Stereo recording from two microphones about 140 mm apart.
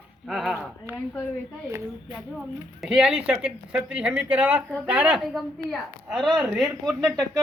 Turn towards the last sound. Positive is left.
turn(degrees=0)  # may be behind; listen again after turning